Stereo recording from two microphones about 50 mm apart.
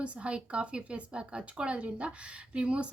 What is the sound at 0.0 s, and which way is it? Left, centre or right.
Speech, right.